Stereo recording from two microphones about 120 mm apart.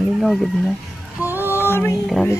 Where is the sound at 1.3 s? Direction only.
15° right (ahead or behind).